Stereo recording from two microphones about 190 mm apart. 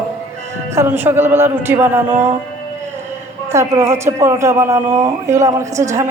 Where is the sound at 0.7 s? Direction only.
15° right (ahead or behind).